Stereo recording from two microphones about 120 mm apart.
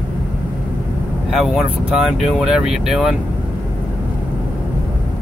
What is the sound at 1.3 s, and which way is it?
Speech, 5° right (ahead or behind).